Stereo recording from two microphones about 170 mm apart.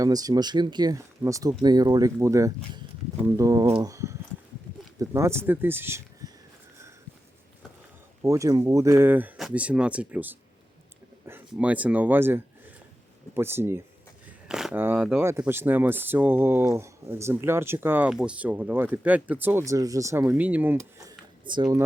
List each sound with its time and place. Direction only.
0.0 s speech: 20° right (ahead or behind)
8.2 s speech: 20° right (ahead or behind)
14.3 s a sound: 5° right (ahead or behind)
15.2 s speech: 15° right (ahead or behind)